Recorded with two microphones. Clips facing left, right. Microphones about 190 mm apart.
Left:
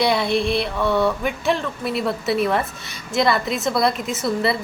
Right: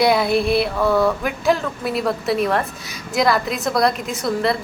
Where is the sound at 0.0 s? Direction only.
5° right (ahead or behind).